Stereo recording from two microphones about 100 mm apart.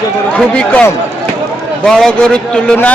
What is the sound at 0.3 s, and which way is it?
A man's voice, 15° left (ahead or behind).